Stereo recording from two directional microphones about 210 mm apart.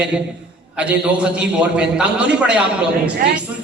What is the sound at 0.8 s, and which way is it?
A man's voice, 5° right (ahead or behind).